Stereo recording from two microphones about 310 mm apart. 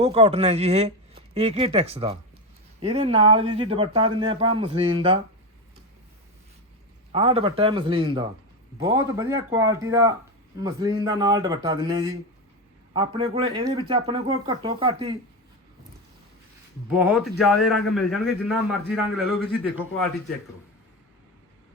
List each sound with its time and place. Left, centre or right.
0.0 s speech: centre
7.1 s speech: centre
16.9 s a man's voice: centre